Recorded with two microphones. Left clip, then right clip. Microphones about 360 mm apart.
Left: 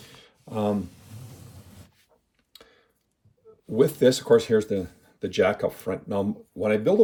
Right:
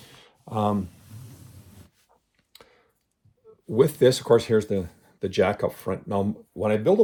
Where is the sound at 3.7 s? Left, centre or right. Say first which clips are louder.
Right 1 dB; right.